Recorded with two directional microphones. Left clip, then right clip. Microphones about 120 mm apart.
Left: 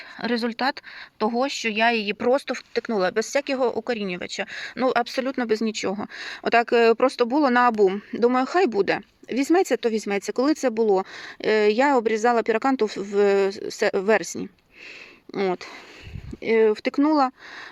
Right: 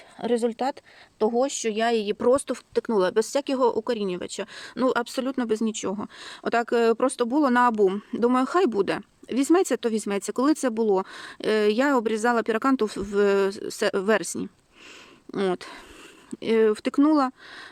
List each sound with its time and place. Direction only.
0.2 s speech: 25° right (ahead or behind)
1.4 s speech: 40° right (ahead or behind)
4.9 s speech: 30° right (ahead or behind)
15.3 s speech: 45° right (ahead or behind); by 17.3 s 25° right (ahead or behind)